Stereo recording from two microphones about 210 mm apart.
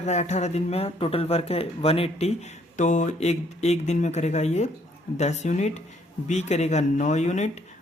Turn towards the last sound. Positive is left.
turn(degrees=35)  # may be behind; listen again after turning